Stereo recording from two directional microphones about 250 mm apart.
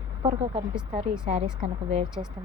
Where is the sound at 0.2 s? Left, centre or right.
Right.